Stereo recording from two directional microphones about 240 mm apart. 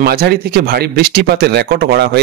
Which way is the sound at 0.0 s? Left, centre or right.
Right.